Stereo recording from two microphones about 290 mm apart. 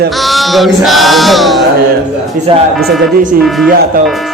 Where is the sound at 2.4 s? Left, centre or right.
Right.